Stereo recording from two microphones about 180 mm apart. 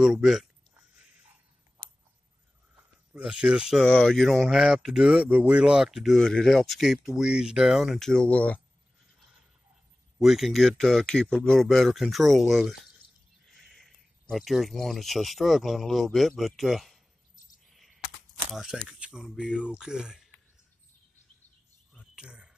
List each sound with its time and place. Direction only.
0.0 s speech: centre (ahead or behind)
3.1 s speech: 5° right (ahead or behind)
10.1 s speech: centre (ahead or behind)
18.5 s speech: centre (ahead or behind)
22.1 s cricket: 5° right (ahead or behind)